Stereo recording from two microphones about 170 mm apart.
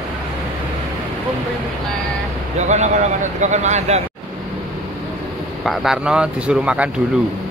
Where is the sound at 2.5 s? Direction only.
45° right (ahead or behind).